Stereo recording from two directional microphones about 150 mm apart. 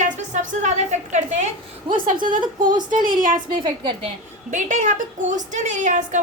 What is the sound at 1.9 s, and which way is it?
Speech, 35° right (ahead or behind).